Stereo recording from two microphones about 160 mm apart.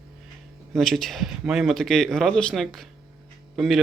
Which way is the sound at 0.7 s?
Centre (ahead or behind).